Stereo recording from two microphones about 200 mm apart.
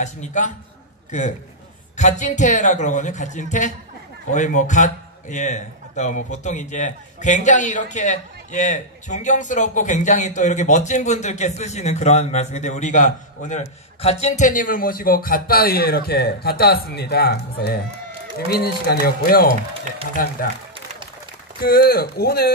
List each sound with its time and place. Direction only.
0.0 s a man's voice: 35° left (ahead or behind)
2.0 s a man's voice: 35° left (ahead or behind)
20.7 s applause: 25° right (ahead or behind)
21.5 s speech: 50° left (ahead or behind)